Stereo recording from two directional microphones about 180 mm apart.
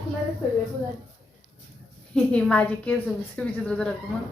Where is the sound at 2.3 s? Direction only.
5° left (ahead or behind).